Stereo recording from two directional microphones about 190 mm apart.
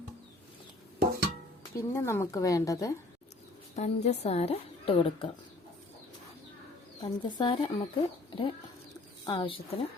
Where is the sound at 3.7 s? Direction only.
35° left (ahead or behind).